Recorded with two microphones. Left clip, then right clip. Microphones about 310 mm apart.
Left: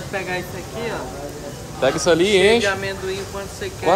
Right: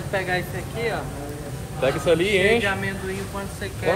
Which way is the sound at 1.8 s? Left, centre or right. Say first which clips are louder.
Left 4 dB; centre.